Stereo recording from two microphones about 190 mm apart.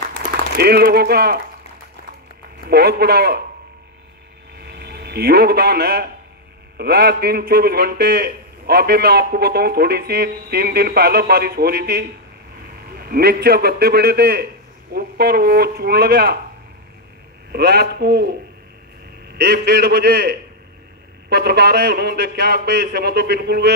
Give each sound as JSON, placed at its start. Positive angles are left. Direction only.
{"t": 0.2, "sound": "speech", "side_deg": -55}
{"t": 2.7, "sound": "a man's voice", "side_deg": -55}
{"t": 4.6, "sound": "hum", "side_deg": -55}
{"t": 6.8, "sound": "a man's voice", "side_deg": -55}
{"t": 17.5, "sound": "a man's voice", "side_deg": -60}
{"t": 19.3, "sound": "a man's voice", "side_deg": -55}